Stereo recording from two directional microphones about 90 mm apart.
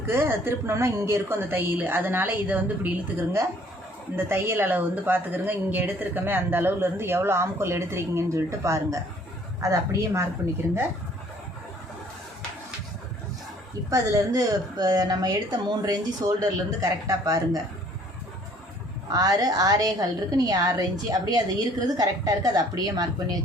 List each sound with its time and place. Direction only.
0.1 s a woman's voice: 25° right (ahead or behind)
4.1 s a woman's voice: 25° right (ahead or behind)
13.9 s a woman's voice: 45° right (ahead or behind)
19.1 s a woman's voice: 45° right (ahead or behind)